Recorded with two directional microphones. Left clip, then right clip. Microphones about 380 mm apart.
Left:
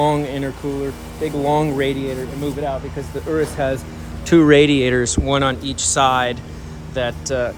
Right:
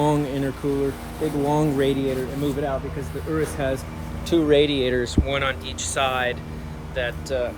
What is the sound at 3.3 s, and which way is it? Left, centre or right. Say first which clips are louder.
Speech: left 5 dB; left.